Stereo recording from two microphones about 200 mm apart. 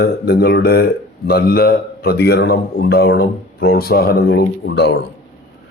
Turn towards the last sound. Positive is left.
turn(degrees=55)  # may be behind; listen again after turning